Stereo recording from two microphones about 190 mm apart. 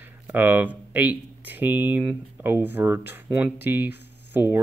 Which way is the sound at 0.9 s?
10° right (ahead or behind).